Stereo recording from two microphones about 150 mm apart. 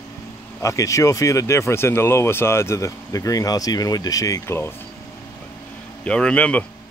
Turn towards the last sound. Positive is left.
turn(degrees=10)  # may be behind; listen again after turning